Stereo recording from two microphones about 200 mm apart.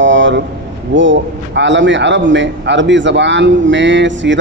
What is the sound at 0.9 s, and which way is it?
A man's voice, 65° right (ahead or behind).